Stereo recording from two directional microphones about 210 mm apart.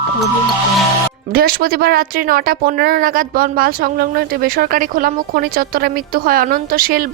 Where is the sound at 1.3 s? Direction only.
45° right (ahead or behind).